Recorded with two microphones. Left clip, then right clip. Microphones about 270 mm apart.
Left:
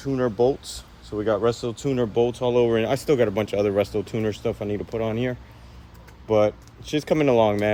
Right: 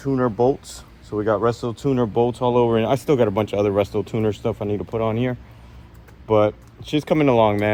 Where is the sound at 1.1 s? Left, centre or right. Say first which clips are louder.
Right 2 dB; right.